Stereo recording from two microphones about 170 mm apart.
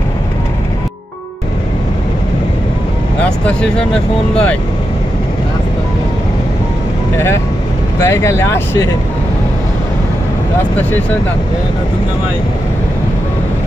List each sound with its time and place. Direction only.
3.3 s speech: 5° left (ahead or behind)
8.0 s speech: 15° left (ahead or behind)